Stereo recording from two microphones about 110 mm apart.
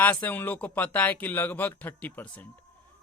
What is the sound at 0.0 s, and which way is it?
A man's voice, 15° left (ahead or behind).